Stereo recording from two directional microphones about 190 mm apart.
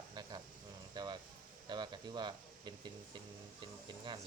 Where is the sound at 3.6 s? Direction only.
25° right (ahead or behind).